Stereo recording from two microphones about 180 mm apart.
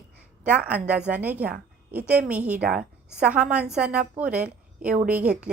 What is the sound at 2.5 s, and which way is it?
Speech, 55° right (ahead or behind).